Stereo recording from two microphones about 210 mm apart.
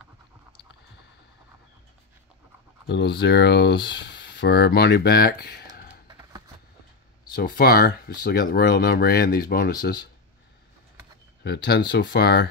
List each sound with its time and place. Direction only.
2.9 s speech: 55° left (ahead or behind)
7.3 s speech: 45° left (ahead or behind)
11.4 s speech: 50° left (ahead or behind)